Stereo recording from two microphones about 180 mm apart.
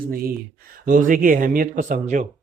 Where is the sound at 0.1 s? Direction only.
55° right (ahead or behind).